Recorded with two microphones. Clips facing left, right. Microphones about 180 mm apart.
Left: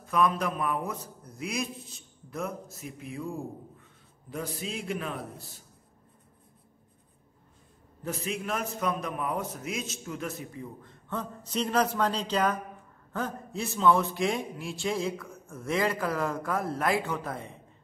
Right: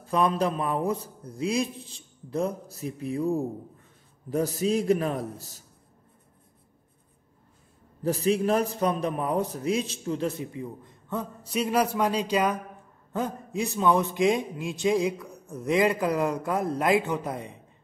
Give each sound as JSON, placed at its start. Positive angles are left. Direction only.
{"t": 0.0, "sound": "a man's voice", "side_deg": -30}
{"t": 8.0, "sound": "a man's voice", "side_deg": -35}
{"t": 10.6, "sound": "a man's voice", "side_deg": -15}